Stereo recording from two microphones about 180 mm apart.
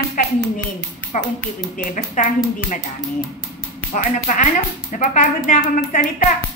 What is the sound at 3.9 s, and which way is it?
Speech, 45° left (ahead or behind).